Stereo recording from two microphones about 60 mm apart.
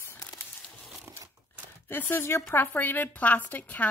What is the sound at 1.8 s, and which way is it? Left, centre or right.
Speech, left.